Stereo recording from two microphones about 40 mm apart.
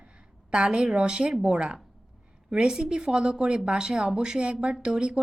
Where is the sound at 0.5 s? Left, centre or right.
Right.